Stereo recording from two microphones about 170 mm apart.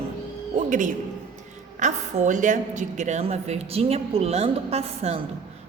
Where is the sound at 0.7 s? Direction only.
50° right (ahead or behind).